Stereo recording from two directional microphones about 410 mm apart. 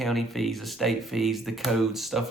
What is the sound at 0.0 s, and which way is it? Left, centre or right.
Speech, centre.